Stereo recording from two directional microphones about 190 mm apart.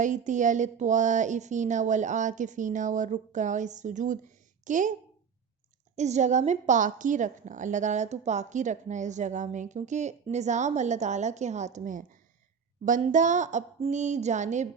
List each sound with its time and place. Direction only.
0.0 s a woman's voice: 40° right (ahead or behind)
6.0 s a woman's voice: 40° right (ahead or behind)